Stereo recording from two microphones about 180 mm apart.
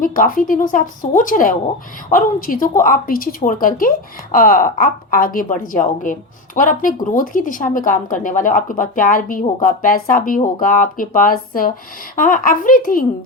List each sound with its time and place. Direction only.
0.0 s a woman's voice: 50° left (ahead or behind)